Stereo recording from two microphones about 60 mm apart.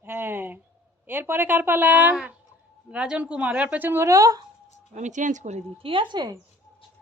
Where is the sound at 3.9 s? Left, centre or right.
Right.